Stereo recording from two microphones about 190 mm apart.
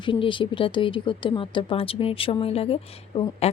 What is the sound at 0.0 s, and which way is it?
Speech, 25° left (ahead or behind).